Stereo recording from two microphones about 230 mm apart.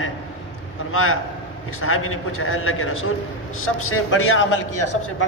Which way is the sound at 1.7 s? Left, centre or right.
Left.